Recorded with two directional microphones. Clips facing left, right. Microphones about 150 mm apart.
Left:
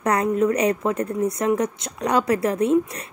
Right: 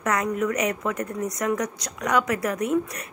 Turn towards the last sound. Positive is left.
turn(degrees=30)  # may be behind; listen again after turning